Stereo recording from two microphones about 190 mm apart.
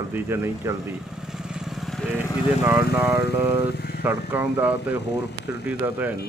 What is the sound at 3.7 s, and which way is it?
Vehicle, 55° left (ahead or behind).